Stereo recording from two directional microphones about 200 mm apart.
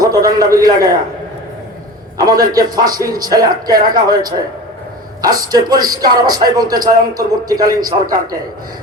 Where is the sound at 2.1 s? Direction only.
20° right (ahead or behind).